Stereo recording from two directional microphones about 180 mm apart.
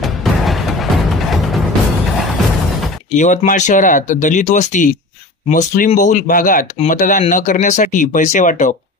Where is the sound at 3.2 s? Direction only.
40° left (ahead or behind).